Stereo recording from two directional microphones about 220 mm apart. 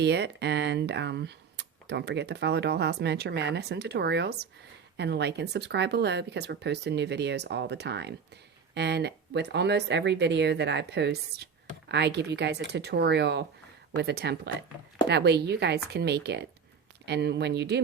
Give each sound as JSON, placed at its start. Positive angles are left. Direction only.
{"t": 0.0, "sound": "speech", "side_deg": -50}